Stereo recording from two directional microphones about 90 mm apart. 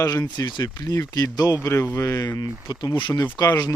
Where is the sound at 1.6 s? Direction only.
35° left (ahead or behind).